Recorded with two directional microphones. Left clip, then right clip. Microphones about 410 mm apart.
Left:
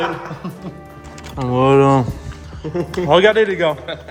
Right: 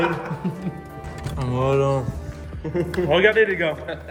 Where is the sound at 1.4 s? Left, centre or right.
Centre.